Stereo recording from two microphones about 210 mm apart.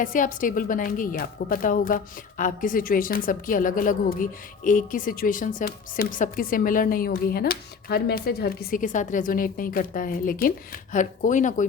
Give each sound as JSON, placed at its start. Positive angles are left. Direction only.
{"t": 0.0, "sound": "a woman's voice", "side_deg": 40}